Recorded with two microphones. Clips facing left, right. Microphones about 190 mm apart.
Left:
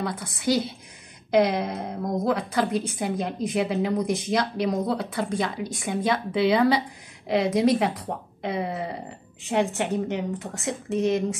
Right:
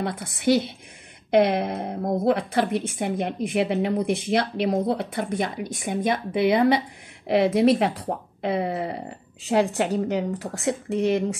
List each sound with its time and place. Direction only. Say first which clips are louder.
0.0 s speech: right 3 dB; 25° right (ahead or behind)